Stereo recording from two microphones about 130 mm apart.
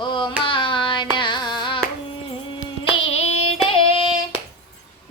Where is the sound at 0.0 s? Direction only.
40° left (ahead or behind).